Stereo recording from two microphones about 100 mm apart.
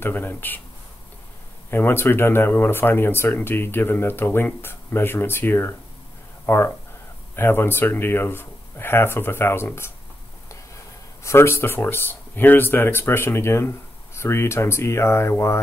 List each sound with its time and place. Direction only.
0.0 s speech: 20° left (ahead or behind)
1.7 s speech: 25° left (ahead or behind)
11.2 s speech: 25° left (ahead or behind)